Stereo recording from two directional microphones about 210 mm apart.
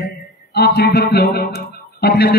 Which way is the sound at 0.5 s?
50° left (ahead or behind).